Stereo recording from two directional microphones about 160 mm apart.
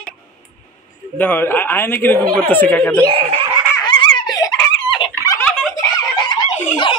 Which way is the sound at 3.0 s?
35° right (ahead or behind).